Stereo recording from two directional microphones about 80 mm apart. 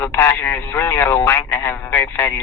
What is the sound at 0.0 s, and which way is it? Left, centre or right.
Speech, left.